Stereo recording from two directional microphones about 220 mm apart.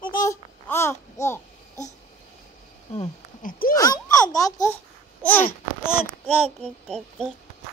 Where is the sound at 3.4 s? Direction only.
40° left (ahead or behind).